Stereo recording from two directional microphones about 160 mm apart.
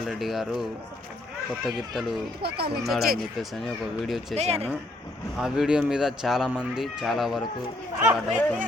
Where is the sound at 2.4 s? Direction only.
80° right.